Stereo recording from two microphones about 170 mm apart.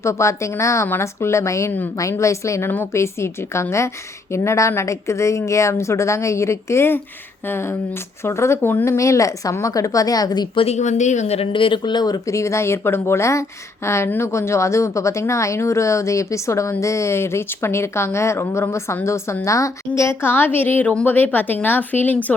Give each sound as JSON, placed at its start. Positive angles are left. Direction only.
{"t": 0.0, "sound": "a woman's voice", "side_deg": 15}